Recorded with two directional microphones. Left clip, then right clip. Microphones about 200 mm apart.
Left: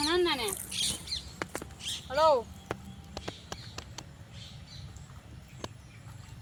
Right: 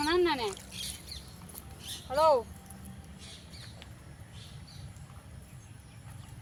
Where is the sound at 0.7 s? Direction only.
50° right (ahead or behind).